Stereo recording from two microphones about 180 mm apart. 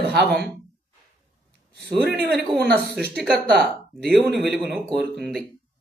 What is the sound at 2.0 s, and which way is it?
Mantra, 65° right (ahead or behind).